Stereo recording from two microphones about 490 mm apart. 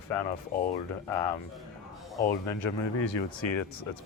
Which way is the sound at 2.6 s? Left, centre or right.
Left.